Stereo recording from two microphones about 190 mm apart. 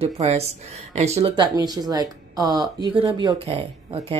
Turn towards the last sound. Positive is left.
turn(degrees=-30)  # may be behind; listen again after turning